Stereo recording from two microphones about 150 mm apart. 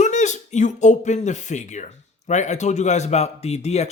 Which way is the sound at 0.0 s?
55° left (ahead or behind).